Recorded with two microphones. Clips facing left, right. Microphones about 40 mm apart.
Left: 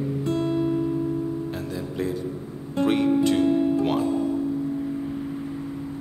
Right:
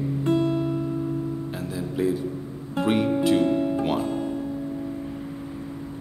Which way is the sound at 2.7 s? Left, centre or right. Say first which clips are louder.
Left 2 dB; centre.